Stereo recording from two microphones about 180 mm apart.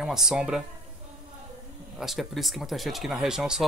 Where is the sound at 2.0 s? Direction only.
Centre (ahead or behind).